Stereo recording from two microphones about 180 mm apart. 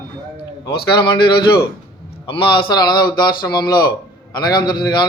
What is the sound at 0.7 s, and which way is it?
A man's voice, 25° left (ahead or behind).